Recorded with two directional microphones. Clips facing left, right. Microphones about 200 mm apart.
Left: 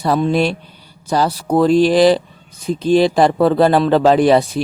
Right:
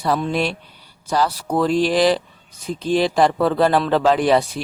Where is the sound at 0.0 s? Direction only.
35° left (ahead or behind).